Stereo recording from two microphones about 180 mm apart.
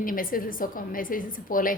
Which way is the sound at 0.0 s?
50° left (ahead or behind).